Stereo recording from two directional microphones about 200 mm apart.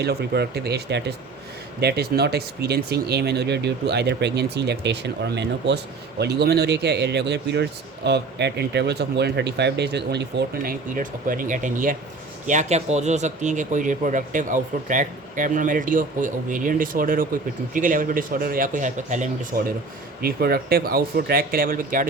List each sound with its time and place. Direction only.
0.0 s speech: 55° right (ahead or behind)
20.2 s speech: 50° right (ahead or behind)